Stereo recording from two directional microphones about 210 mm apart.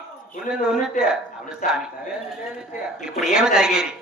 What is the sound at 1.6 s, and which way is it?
Speech, 40° left (ahead or behind).